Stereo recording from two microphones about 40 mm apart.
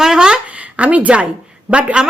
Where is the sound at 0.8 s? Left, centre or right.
Right.